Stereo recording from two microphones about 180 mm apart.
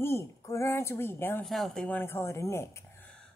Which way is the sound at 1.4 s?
Centre (ahead or behind).